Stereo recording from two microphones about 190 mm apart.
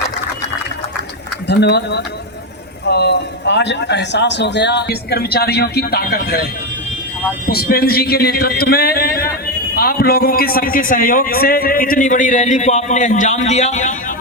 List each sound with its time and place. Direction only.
1.5 s a man's voice: 60° left (ahead or behind)
7.4 s a man's voice: 55° left (ahead or behind); by 13.9 s 40° left (ahead or behind)